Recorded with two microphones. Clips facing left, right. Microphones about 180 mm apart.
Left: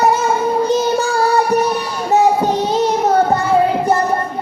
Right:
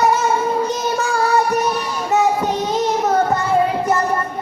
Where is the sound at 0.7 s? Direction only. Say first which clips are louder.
Left 5 dB; 30° left (ahead or behind).